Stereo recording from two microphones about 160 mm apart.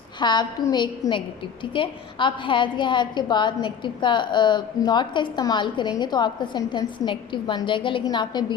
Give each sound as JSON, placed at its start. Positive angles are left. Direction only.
{"t": 0.2, "sound": "a woman's voice", "side_deg": 25}